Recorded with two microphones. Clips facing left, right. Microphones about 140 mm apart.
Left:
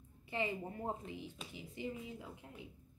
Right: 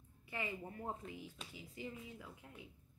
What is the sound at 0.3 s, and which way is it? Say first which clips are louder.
A woman's voice: left 5 dB; 25° left (ahead or behind).